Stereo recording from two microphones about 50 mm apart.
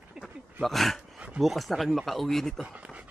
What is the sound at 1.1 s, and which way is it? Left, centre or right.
Dog, right.